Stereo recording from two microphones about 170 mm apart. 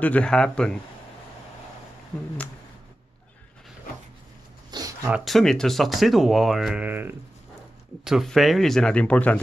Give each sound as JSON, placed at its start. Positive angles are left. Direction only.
{"t": 0.0, "sound": "speech", "side_deg": 5}
{"t": 4.6, "sound": "a sound", "side_deg": -20}
{"t": 5.1, "sound": "speech", "side_deg": 0}